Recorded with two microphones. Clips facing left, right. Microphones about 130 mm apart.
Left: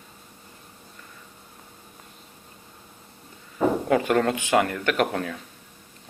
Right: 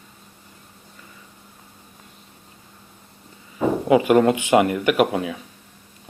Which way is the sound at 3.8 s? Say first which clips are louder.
Right 10 dB; 10° right (ahead or behind).